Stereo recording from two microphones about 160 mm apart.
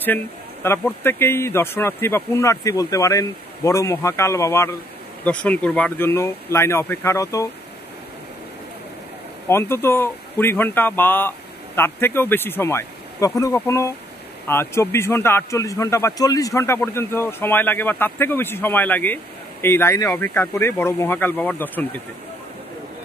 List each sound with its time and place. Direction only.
0.0 s a man's voice: 15° left (ahead or behind)
9.5 s a man's voice: 15° left (ahead or behind)